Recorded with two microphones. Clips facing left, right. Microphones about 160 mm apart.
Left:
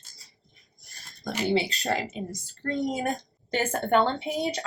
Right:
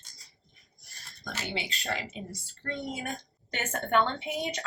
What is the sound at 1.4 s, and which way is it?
Speech, 35° left (ahead or behind).